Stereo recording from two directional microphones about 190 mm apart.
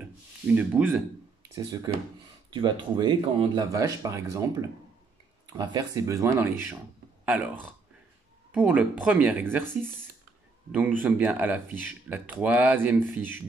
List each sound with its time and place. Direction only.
0.6 s speech: 5° right (ahead or behind)
1.5 s speech: 20° right (ahead or behind)
8.5 s speech: 10° right (ahead or behind)
10.7 s speech: 10° right (ahead or behind)